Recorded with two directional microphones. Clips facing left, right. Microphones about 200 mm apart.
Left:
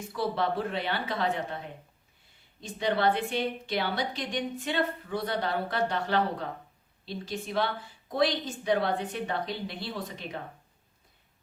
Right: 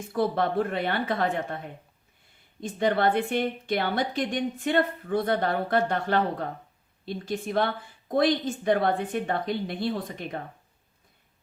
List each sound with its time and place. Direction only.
0.1 s a woman's voice: 50° right (ahead or behind)
2.6 s a woman's voice: 50° right (ahead or behind)